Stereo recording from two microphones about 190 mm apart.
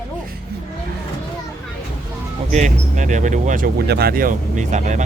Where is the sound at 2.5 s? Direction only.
40° right (ahead or behind).